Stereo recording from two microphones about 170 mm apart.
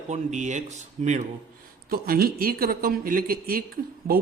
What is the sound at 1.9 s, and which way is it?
Speech, 60° right (ahead or behind).